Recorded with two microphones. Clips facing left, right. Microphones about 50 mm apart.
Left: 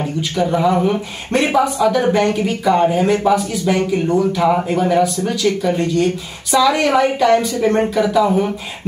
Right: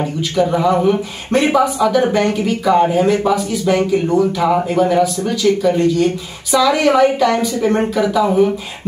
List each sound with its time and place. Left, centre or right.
0.0 s speech: centre